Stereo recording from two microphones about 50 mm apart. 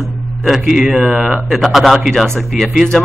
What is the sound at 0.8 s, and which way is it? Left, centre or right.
Speech, centre.